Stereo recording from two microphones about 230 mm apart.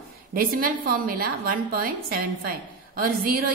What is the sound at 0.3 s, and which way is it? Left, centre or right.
A woman's voice, right.